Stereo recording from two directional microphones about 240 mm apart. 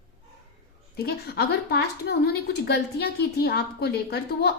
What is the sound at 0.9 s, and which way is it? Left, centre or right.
A woman's voice, left.